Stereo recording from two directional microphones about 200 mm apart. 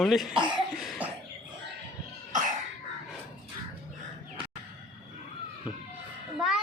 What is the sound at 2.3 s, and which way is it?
Cough, 40° right (ahead or behind).